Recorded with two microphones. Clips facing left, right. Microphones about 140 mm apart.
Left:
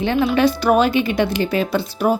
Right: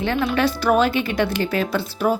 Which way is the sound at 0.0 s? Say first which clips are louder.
Left 4 dB; 20° left (ahead or behind).